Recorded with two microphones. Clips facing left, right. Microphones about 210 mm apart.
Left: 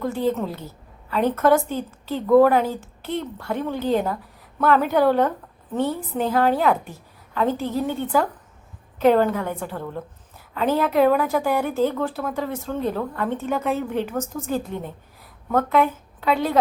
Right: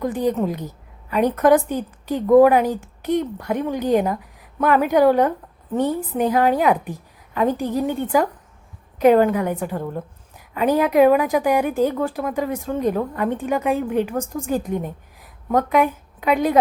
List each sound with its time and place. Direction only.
0.0 s a woman's voice: 15° right (ahead or behind)